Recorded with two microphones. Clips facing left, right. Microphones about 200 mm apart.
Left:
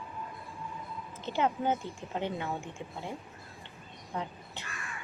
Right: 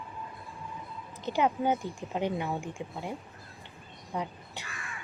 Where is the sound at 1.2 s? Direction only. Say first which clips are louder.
Right 2 dB; 15° right (ahead or behind).